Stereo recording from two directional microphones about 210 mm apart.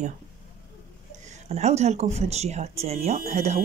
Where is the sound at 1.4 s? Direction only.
30° right (ahead or behind).